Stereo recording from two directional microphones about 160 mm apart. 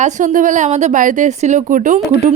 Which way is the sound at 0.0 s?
50° right (ahead or behind).